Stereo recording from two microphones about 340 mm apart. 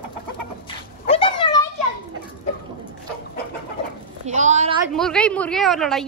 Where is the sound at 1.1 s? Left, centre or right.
Centre.